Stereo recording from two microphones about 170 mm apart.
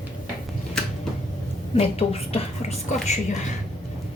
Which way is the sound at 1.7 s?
35° left (ahead or behind).